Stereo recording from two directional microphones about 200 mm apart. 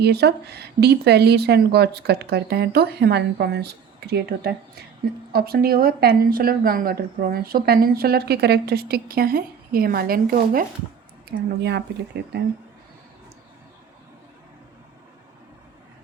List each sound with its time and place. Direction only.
0.0 s speech: 55° right (ahead or behind)
11.6 s speech: 60° right (ahead or behind)